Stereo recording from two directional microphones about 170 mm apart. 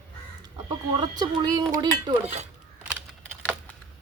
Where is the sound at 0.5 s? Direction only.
25° right (ahead or behind).